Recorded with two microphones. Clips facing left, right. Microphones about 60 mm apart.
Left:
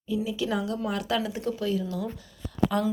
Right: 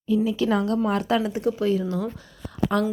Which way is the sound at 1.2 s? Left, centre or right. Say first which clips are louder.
Right 6 dB; centre.